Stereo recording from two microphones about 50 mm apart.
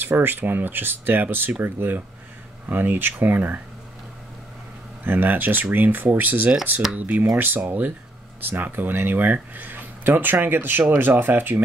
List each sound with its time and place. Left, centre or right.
0.0 s speech: right
5.0 s speech: right
7.3 s speech: right